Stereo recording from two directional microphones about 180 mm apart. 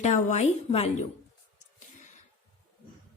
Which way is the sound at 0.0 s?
40° left (ahead or behind).